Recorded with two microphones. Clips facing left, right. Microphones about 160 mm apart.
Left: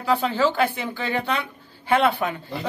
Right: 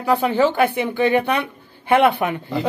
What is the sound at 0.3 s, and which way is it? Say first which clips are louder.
Speech: right 4 dB; 15° right (ahead or behind).